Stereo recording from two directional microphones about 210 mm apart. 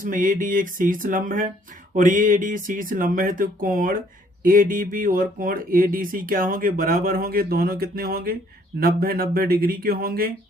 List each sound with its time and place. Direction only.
0.0 s speech: 40° right (ahead or behind)